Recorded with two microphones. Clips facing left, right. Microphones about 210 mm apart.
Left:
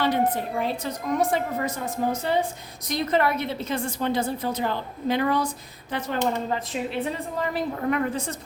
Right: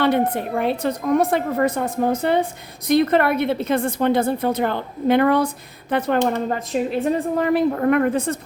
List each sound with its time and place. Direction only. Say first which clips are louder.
0.0 s a woman's voice: right 4 dB; 60° right (ahead or behind)